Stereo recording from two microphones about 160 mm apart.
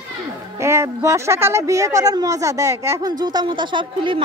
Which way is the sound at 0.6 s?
15° right (ahead or behind).